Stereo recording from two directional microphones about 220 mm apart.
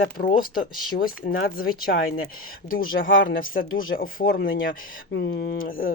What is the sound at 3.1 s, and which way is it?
Speech, 60° left (ahead or behind).